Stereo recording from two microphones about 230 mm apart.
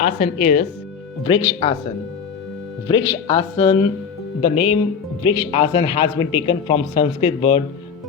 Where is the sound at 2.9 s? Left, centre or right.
Left.